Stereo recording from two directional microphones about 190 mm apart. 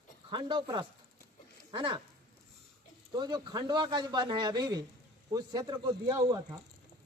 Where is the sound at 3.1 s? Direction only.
25° right (ahead or behind).